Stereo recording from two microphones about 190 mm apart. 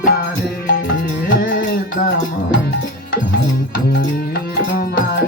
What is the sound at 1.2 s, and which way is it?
Music, 50° left (ahead or behind).